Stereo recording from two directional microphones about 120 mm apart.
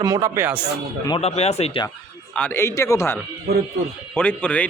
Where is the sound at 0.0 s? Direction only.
30° right (ahead or behind).